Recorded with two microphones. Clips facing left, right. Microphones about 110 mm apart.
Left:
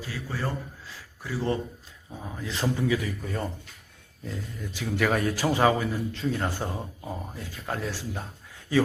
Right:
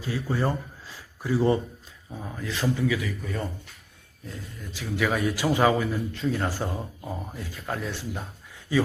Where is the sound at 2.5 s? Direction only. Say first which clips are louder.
Even; 30° left (ahead or behind).